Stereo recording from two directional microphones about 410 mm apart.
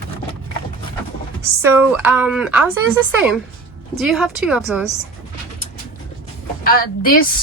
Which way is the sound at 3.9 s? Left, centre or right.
Centre.